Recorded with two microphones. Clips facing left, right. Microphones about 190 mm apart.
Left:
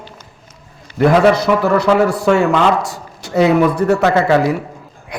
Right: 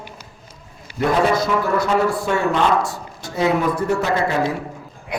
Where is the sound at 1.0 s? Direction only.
70° left (ahead or behind).